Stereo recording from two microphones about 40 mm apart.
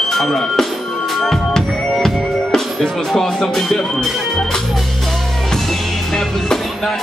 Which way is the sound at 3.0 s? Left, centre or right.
Centre.